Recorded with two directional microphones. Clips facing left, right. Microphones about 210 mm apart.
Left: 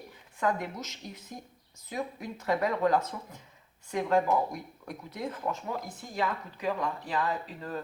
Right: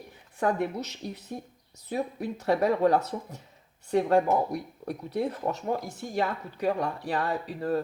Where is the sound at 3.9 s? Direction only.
35° right (ahead or behind).